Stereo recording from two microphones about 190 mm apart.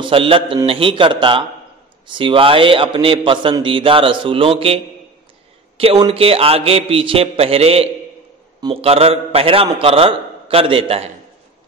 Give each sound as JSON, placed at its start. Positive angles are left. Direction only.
{"t": 0.0, "sound": "a man's voice", "side_deg": -30}
{"t": 6.0, "sound": "a man's voice", "side_deg": -30}